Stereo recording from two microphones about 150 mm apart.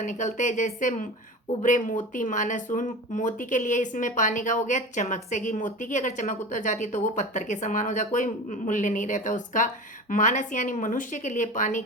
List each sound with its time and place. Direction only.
0.0 s a woman's voice: 55° left (ahead or behind)